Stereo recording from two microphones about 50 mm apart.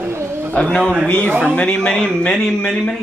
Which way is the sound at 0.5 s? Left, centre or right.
Centre.